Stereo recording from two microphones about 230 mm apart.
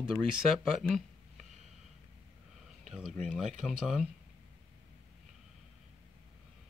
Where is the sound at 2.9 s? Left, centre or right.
Centre.